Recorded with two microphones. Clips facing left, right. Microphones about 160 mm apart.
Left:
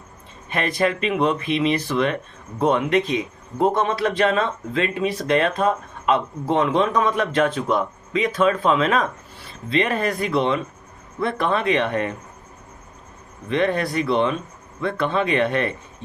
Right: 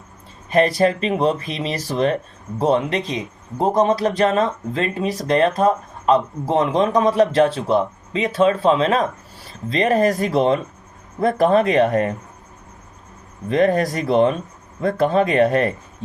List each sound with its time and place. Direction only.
0.5 s speech: 35° right (ahead or behind)
13.5 s speech: 40° right (ahead or behind)